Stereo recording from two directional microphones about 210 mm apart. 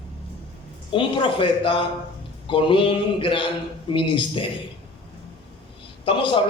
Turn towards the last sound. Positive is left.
turn(degrees=25)  # may be behind; listen again after turning